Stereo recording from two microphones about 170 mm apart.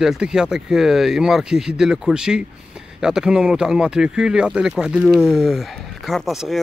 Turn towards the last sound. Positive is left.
turn(degrees=0)  # may be behind; listen again after turning